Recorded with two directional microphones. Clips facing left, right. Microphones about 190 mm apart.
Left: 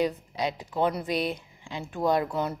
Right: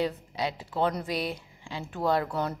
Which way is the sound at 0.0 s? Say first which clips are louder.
Left 2 dB; 15° left (ahead or behind).